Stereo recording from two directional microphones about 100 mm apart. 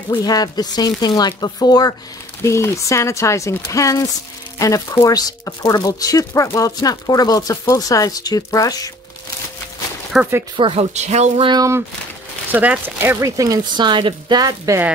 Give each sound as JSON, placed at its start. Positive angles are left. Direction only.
{"t": 0.1, "sound": "speech", "side_deg": 40}
{"t": 2.4, "sound": "speech", "side_deg": 30}
{"t": 10.1, "sound": "speech", "side_deg": -5}
{"t": 10.5, "sound": "speech", "side_deg": -65}
{"t": 11.5, "sound": "speech", "side_deg": -35}
{"t": 12.4, "sound": "speech", "side_deg": -15}
{"t": 13.2, "sound": "speech", "side_deg": -35}
{"t": 14.7, "sound": "speech", "side_deg": -35}